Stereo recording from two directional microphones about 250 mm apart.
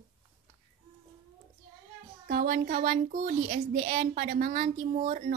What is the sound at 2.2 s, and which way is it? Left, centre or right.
A child's voice, right.